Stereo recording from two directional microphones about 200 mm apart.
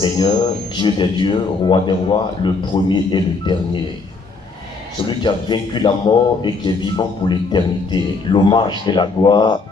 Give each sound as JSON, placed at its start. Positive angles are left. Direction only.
{"t": 0.0, "sound": "speech", "side_deg": 20}
{"t": 5.0, "sound": "speech", "side_deg": 25}